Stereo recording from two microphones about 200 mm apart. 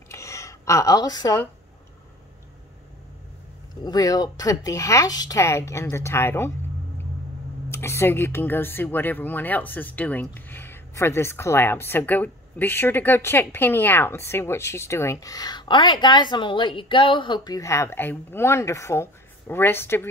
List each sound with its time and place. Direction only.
0.1 s a sound: 15° left (ahead or behind)
3.8 s speech: 20° left (ahead or behind)
7.7 s speech: 15° left (ahead or behind)